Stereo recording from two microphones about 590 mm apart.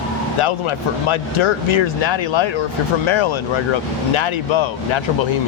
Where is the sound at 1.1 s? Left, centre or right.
Left.